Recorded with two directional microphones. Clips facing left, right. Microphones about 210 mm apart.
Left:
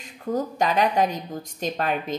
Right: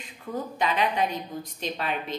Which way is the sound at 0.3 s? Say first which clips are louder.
Left 5 dB; 45° left (ahead or behind).